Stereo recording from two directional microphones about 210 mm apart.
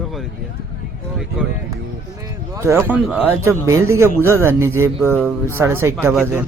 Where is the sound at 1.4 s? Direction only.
5° right (ahead or behind).